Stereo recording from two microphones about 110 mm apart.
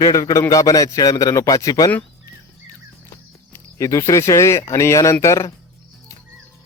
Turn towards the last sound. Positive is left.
turn(degrees=30)  # may be behind; listen again after turning